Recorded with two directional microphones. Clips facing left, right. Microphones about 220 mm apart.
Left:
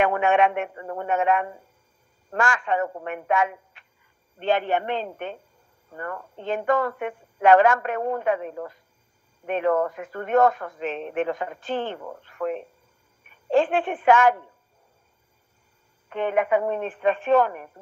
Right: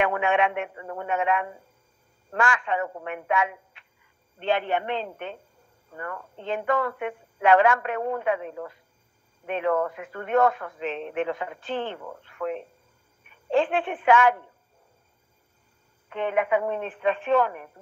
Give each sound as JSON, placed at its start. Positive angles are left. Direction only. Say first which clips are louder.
{"t": 0.0, "sound": "a man's voice", "louder": "left 3 dB", "side_deg": 45}
{"t": 16.1, "sound": "a man's voice", "louder": "left 2 dB", "side_deg": 45}